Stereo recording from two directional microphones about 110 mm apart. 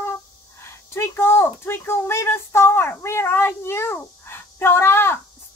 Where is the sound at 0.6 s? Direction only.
25° left (ahead or behind).